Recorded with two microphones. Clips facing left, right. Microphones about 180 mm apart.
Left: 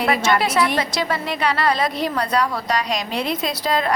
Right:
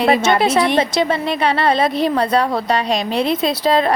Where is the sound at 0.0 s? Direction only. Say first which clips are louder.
Right 5 dB; 25° right (ahead or behind).